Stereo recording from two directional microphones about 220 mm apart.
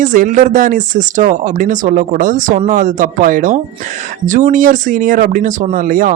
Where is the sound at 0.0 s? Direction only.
35° right (ahead or behind).